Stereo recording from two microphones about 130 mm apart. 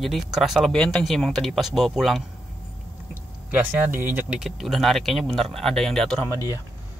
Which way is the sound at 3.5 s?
15° right (ahead or behind).